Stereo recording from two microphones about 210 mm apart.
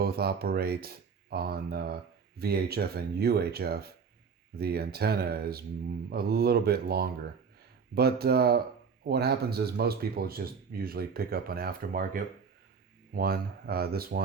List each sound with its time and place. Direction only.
0.0 s speech: 50° right (ahead or behind)